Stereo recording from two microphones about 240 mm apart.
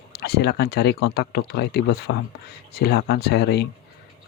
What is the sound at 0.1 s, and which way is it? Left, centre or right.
Speech, left.